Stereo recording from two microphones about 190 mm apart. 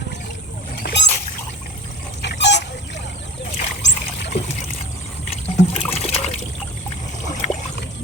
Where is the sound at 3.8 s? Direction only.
70° left (ahead or behind).